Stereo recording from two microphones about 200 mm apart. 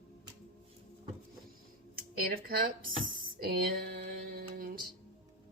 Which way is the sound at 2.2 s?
45° right (ahead or behind).